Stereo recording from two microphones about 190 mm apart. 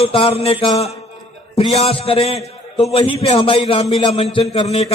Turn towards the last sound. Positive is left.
turn(degrees=30)  # may be behind; listen again after turning